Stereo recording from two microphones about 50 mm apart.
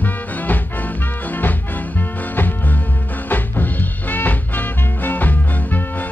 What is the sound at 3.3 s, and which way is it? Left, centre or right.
Swing music, left.